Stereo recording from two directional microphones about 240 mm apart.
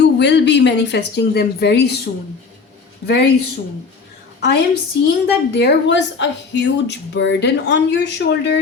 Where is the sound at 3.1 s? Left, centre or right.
Left.